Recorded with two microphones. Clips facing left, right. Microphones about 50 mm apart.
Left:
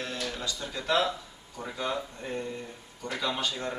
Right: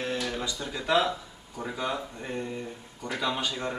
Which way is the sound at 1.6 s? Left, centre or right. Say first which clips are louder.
Right 1 dB; centre.